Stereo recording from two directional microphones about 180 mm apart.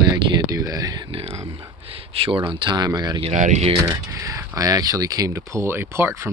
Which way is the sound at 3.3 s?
40° right (ahead or behind).